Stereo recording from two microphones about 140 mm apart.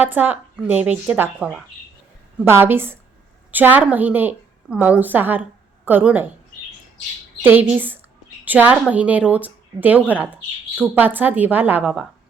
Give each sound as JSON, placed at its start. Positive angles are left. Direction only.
{"t": 0.0, "sound": "a woman's voice", "side_deg": -10}
{"t": 7.4, "sound": "speech", "side_deg": -15}